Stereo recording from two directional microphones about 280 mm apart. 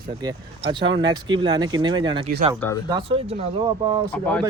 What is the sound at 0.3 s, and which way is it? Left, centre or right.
Speech, centre.